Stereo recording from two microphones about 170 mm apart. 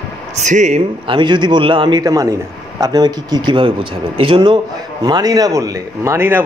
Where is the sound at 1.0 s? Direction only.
30° right (ahead or behind).